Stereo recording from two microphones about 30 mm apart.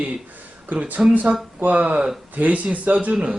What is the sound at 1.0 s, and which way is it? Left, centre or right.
Speech, right.